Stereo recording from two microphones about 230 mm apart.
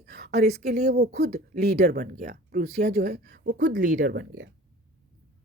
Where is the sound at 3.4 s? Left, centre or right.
Right.